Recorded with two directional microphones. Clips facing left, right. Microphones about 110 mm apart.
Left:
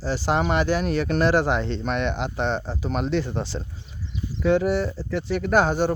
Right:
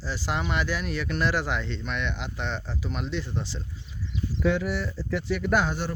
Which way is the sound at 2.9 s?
45° left (ahead or behind).